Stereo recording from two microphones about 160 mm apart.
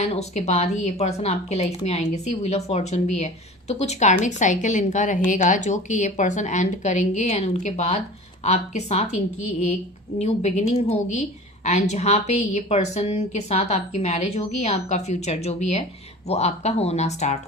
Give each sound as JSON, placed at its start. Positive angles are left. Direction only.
{"t": 0.0, "sound": "a woman's voice", "side_deg": 45}